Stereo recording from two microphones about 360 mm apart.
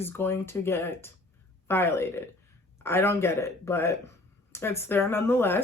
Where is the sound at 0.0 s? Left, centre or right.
Centre.